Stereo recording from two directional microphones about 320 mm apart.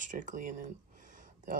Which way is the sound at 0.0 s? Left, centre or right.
Right.